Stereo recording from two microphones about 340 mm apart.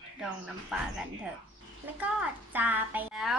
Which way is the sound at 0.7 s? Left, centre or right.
Centre.